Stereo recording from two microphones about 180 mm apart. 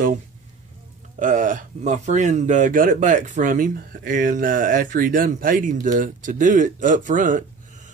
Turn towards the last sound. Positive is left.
turn(degrees=-45)  # may be behind; listen again after turning